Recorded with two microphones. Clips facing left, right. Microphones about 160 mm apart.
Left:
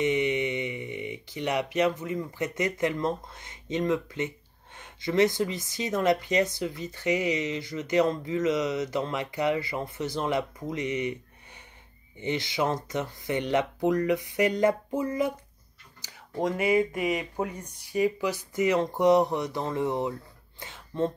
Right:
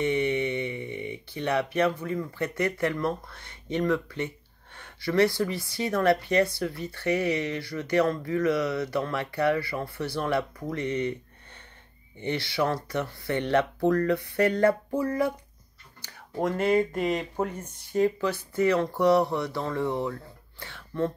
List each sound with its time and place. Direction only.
0.0 s speech: 15° left (ahead or behind)
12.2 s speech: 20° left (ahead or behind)
16.4 s speech: 10° left (ahead or behind)
17.6 s speech: 10° left (ahead or behind)